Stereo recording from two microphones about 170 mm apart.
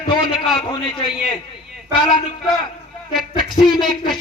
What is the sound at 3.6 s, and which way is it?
Speech, 30° left (ahead or behind).